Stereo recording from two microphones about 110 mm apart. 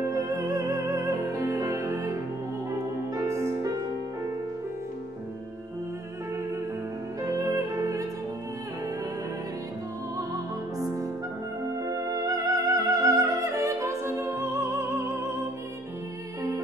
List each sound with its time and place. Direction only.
0.0 s music: 30° right (ahead or behind)
3.2 s music: 25° right (ahead or behind)
7.2 s music: 30° right (ahead or behind)
11.7 s music: 30° right (ahead or behind)